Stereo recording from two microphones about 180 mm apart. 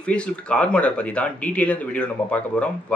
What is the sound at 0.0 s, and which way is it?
Speech, 5° left (ahead or behind).